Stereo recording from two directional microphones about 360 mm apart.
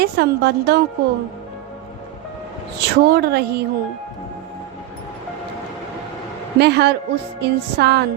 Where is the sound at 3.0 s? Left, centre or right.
Right.